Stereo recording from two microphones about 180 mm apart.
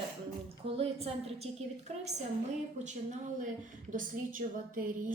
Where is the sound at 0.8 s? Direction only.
35° right (ahead or behind).